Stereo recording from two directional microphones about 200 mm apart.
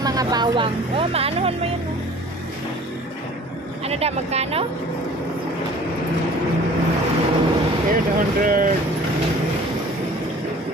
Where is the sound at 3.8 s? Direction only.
30° right (ahead or behind).